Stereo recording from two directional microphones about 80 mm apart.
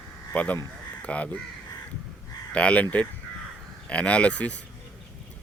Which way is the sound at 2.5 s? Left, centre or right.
Centre.